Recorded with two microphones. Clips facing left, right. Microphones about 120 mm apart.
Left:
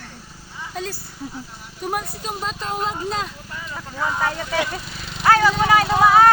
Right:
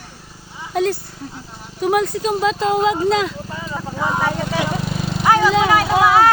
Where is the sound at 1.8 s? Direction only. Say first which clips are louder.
Right 10 dB; 90° right.